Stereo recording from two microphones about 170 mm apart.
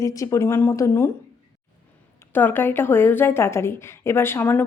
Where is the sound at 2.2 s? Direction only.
10° left (ahead or behind).